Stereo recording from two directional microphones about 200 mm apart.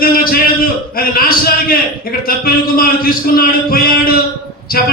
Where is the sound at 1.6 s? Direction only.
45° left (ahead or behind).